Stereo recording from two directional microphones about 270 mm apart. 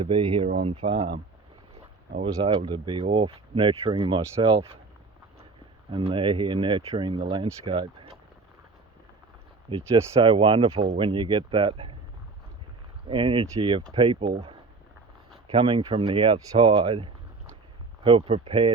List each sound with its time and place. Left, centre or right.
0.0 s speech: centre
5.9 s speech: centre
9.6 s speech: centre
13.1 s speech: centre
15.5 s speech: centre